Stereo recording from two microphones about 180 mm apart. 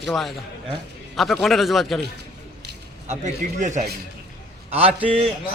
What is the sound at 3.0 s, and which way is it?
A man's voice, 40° right (ahead or behind).